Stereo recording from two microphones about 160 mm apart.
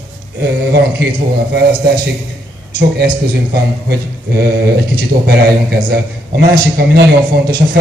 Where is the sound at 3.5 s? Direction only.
80° right.